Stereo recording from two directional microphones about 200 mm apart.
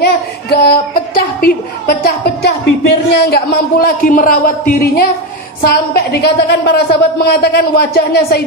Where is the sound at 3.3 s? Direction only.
50° left (ahead or behind).